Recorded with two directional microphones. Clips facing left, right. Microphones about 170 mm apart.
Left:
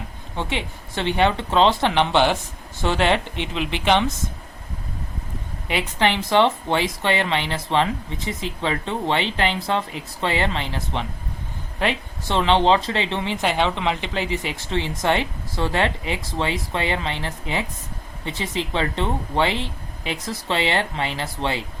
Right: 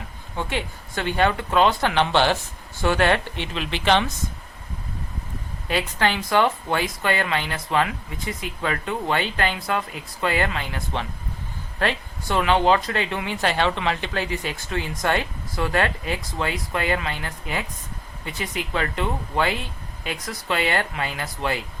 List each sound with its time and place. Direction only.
0.3 s speech: 25° left (ahead or behind)
5.6 s speech: 20° left (ahead or behind)